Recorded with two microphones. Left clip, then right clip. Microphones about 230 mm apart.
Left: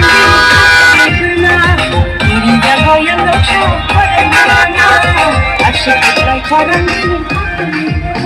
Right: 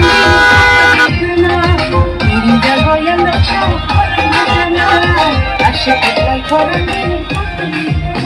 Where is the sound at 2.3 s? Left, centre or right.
Left.